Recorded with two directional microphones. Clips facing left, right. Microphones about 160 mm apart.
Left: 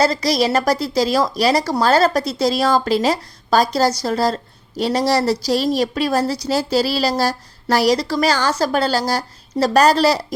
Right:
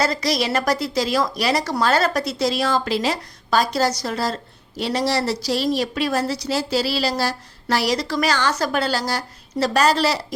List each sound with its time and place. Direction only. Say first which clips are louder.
0.0 s a woman's voice: left 4 dB; 35° left (ahead or behind)